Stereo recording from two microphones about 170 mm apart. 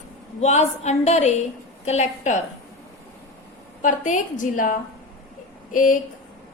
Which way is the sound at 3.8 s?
50° left (ahead or behind).